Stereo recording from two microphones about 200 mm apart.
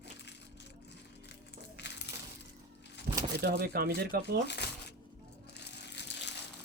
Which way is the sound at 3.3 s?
50° right (ahead or behind).